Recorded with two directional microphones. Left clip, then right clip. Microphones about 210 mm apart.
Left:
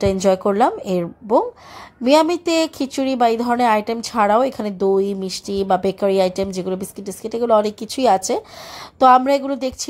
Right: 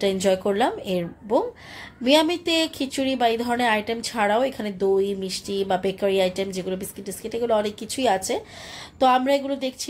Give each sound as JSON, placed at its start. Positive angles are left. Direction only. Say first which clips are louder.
{"t": 0.0, "sound": "a woman's voice", "louder": "left 5 dB", "side_deg": 30}